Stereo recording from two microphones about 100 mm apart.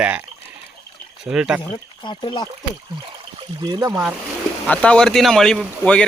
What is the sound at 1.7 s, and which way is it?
Speech, 55° left (ahead or behind).